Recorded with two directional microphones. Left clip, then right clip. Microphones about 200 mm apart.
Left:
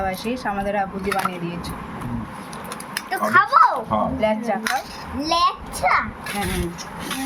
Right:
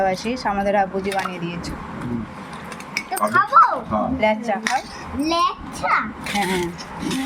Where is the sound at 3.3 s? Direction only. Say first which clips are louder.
Even; 30° left (ahead or behind).